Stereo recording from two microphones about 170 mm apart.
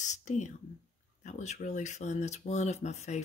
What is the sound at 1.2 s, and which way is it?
Speech, 45° left (ahead or behind).